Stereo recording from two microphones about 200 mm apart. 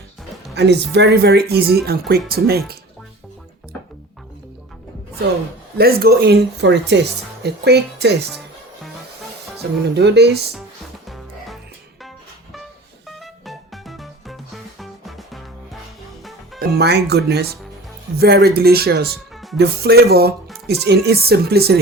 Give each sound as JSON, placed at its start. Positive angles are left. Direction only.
{"t": 0.5, "sound": "speech", "side_deg": -55}
{"t": 5.7, "sound": "speech", "side_deg": -50}
{"t": 9.6, "sound": "speech", "side_deg": -55}
{"t": 11.0, "sound": "music", "side_deg": 0}
{"t": 13.1, "sound": "music", "side_deg": 0}
{"t": 16.6, "sound": "speech", "side_deg": -50}